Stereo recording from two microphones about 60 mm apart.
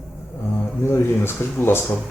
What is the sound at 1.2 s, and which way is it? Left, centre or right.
Speech, left.